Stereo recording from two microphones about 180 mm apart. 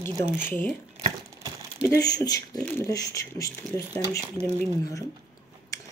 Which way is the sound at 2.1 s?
20° left (ahead or behind).